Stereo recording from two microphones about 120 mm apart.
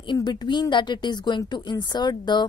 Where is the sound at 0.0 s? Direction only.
40° left (ahead or behind).